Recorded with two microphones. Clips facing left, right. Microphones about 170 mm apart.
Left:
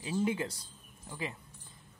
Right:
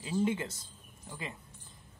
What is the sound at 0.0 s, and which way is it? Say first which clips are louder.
Speech: right 1 dB; 10° left (ahead or behind).